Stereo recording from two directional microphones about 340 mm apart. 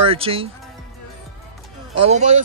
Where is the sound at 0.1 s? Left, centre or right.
Centre.